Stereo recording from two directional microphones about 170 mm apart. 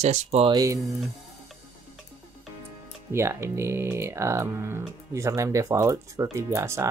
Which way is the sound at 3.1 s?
15° right (ahead or behind).